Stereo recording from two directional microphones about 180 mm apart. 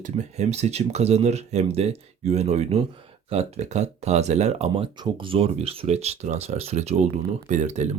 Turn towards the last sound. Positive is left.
turn(degrees=-40)  # may be behind; listen again after turning